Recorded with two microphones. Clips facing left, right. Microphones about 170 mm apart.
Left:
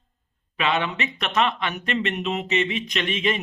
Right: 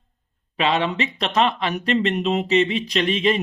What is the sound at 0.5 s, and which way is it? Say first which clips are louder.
Speech: right 3 dB; 30° right (ahead or behind).